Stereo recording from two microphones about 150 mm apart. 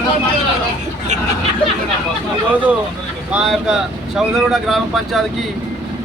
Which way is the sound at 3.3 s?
5° right (ahead or behind).